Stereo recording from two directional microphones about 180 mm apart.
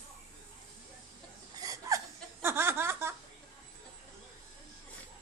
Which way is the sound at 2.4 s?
15° right (ahead or behind).